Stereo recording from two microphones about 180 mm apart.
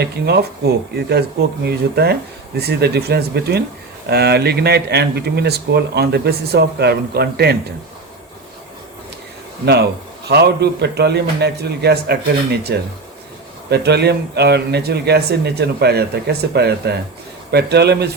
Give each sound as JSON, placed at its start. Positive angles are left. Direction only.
{"t": 0.0, "sound": "speech", "side_deg": -65}
{"t": 9.6, "sound": "speech", "side_deg": -65}